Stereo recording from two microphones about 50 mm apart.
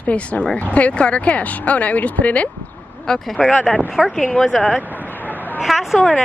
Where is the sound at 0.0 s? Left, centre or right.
Left.